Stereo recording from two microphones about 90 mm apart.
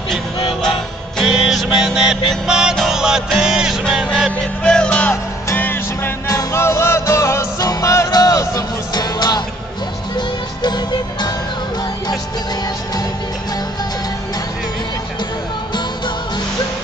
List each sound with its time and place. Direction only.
0.1 s music: centre (ahead or behind)
5.1 s music: 25° left (ahead or behind)
6.2 s music: 35° left (ahead or behind); by 11.3 s 50° left (ahead or behind)